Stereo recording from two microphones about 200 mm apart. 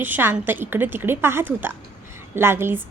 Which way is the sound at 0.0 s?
10° right (ahead or behind).